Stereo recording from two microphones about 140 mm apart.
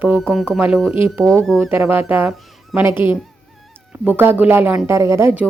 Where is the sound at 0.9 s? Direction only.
15° right (ahead or behind).